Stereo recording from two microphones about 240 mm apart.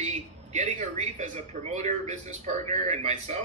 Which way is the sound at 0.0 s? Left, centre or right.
Right.